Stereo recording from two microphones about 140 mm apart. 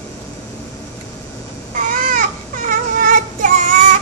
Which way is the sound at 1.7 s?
70° right (ahead or behind).